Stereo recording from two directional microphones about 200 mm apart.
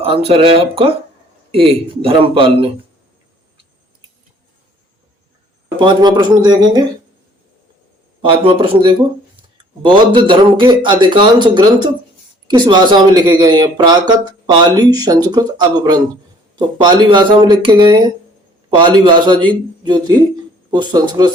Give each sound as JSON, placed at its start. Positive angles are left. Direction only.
{"t": 0.0, "sound": "speech", "side_deg": -30}
{"t": 5.8, "sound": "speech", "side_deg": -25}
{"t": 8.2, "sound": "speech", "side_deg": -25}